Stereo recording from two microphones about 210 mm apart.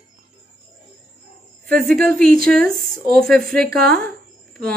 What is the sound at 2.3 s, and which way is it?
Speech, 40° right (ahead or behind).